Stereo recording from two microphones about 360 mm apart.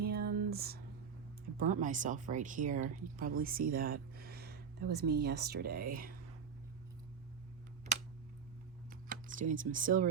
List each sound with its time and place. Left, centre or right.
0.0 s a sound: right
1.5 s speech: right
9.0 s speech: right